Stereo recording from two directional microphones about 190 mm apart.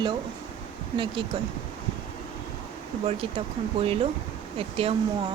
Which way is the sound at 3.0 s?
30° right (ahead or behind).